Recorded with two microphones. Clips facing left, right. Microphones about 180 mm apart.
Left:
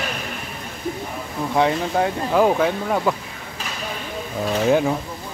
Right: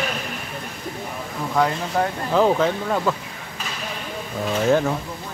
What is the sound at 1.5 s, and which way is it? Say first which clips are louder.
Speech: left 2 dB; 20° left (ahead or behind).